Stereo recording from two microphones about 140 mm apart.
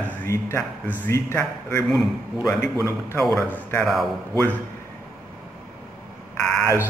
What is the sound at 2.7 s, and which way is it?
A man's voice, 20° left (ahead or behind).